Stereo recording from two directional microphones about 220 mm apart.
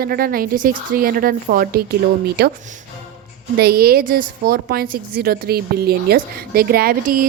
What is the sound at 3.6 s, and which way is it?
A woman's voice, 45° right (ahead or behind).